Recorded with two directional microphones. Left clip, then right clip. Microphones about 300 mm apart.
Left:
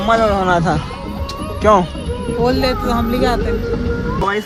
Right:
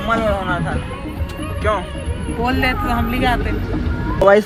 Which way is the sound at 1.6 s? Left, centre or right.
Left.